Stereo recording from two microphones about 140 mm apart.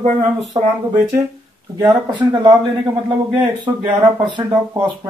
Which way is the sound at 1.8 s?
30° right (ahead or behind).